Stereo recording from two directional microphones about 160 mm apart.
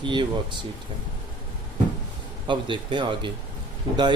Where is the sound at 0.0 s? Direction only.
30° right (ahead or behind).